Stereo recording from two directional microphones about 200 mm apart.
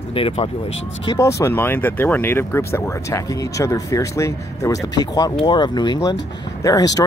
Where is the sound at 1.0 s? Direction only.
15° left (ahead or behind).